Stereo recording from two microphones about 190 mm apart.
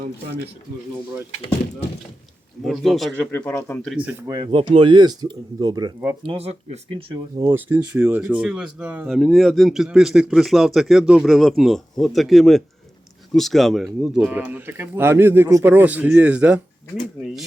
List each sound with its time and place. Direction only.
2.6 s speech: centre (ahead or behind)
3.3 s speech: 15° left (ahead or behind)
3.8 s speech: 5° right (ahead or behind)
4.3 s speech: 25° right (ahead or behind)
7.5 s speech: 10° right (ahead or behind)